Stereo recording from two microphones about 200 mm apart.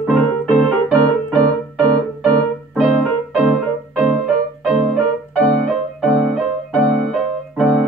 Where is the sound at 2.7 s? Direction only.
5° right (ahead or behind).